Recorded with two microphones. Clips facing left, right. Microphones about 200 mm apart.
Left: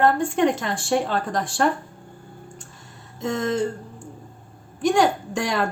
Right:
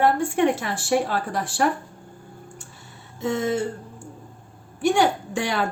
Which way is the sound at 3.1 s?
5° right (ahead or behind).